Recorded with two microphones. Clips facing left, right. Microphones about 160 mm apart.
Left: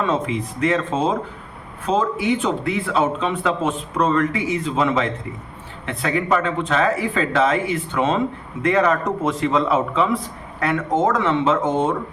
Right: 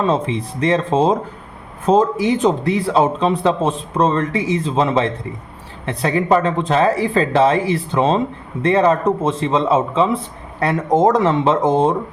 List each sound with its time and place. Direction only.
0.0 s a man's voice: 30° right (ahead or behind)